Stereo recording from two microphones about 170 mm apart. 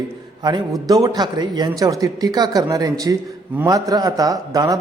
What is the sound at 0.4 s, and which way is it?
Speech, 25° right (ahead or behind).